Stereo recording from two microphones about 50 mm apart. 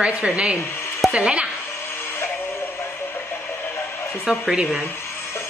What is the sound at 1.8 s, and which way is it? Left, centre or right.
Synthetic singing, left.